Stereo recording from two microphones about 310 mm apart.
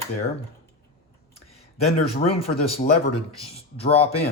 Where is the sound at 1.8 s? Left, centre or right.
Centre.